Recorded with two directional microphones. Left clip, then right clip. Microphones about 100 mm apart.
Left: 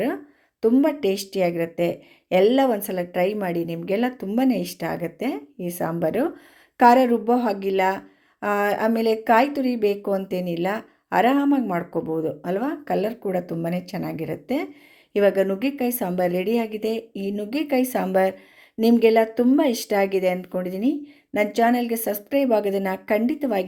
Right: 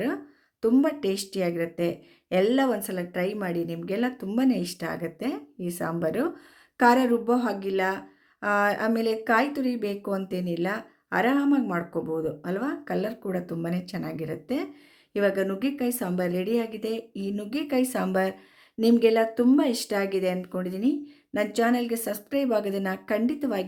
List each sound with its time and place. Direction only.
0.8 s a woman's voice: 20° left (ahead or behind)